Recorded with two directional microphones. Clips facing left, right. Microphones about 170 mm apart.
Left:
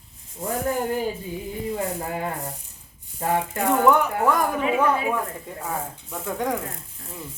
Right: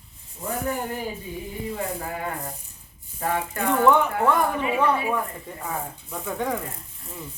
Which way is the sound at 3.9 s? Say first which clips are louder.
Right 1 dB; 10° left (ahead or behind).